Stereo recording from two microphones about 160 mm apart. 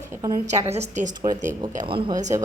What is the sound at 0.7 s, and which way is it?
Speech, 45° right (ahead or behind).